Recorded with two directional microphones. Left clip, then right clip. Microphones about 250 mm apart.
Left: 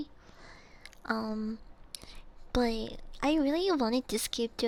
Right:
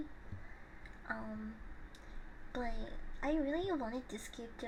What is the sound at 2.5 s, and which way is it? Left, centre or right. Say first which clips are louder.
Speech: left 12 dB; left.